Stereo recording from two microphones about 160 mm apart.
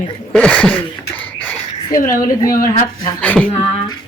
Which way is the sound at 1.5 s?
20° left (ahead or behind).